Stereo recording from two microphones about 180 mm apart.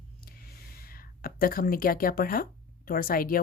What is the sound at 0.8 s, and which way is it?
Speech, 55° left (ahead or behind).